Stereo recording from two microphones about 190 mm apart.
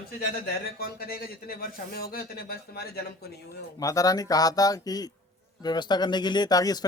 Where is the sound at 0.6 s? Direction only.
50° left (ahead or behind).